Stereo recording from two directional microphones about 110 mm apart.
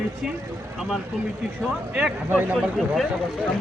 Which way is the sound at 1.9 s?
15° right (ahead or behind).